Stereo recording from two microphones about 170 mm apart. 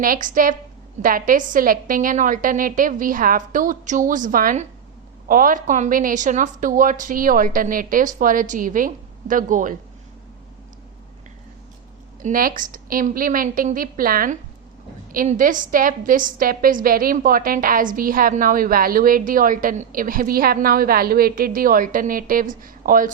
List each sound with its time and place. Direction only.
0.0 s a woman's voice: 55° right (ahead or behind)
12.2 s a woman's voice: 55° right (ahead or behind)